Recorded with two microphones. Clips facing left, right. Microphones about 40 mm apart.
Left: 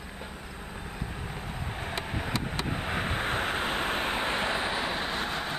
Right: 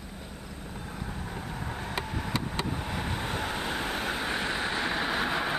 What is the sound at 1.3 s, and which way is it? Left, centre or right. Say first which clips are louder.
Vehicle: right 1 dB; left.